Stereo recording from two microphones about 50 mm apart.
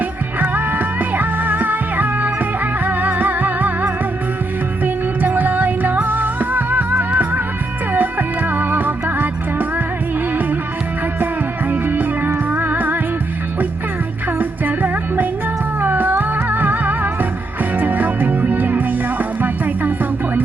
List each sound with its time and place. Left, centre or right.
0.5 s music: right
5.2 s music: right
11.7 s music: right
14.3 s music: right